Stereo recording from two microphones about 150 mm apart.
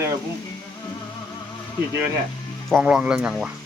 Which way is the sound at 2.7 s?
5° right (ahead or behind).